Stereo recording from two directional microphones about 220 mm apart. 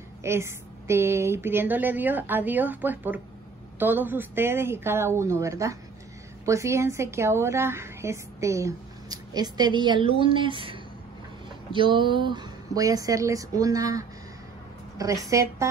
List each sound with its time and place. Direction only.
0.2 s a woman's voice: 10° right (ahead or behind)